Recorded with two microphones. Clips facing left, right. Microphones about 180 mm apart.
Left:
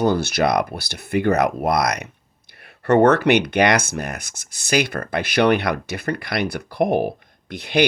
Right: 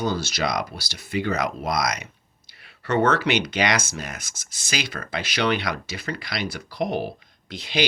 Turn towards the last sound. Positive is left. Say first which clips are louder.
# left 6 dB
turn(degrees=60)  # may be behind; listen again after turning